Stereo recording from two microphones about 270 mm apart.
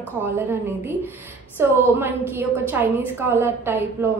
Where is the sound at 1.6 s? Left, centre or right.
Centre.